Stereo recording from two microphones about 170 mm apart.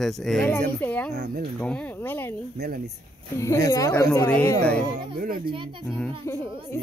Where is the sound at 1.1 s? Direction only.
75° right (ahead or behind).